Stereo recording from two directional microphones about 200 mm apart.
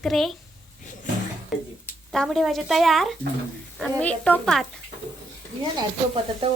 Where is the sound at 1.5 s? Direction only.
Centre (ahead or behind).